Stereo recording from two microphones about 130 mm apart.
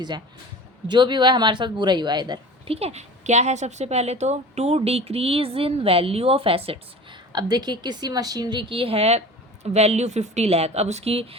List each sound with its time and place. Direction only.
0.9 s a woman's voice: 35° right (ahead or behind)
2.6 s a woman's voice: 50° right (ahead or behind)
7.3 s a woman's voice: 30° right (ahead or behind); by 11.3 s 50° right (ahead or behind)